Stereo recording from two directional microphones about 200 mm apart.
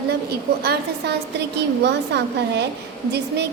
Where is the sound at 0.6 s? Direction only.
55° right (ahead or behind).